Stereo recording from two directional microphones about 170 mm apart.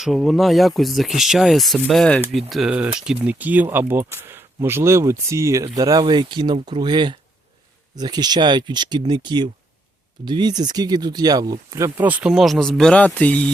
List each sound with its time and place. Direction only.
0.0 s speech: centre (ahead or behind)